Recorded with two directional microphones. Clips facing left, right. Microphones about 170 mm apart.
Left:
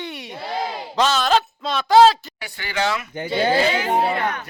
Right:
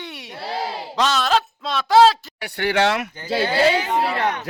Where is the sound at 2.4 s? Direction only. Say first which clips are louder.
Right 5 dB; 65° right (ahead or behind).